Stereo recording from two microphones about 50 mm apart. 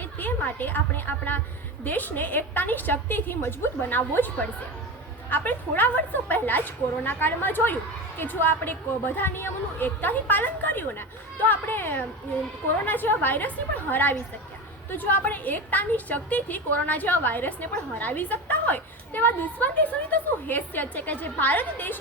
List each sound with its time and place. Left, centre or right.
0.0 s a woman's voice: left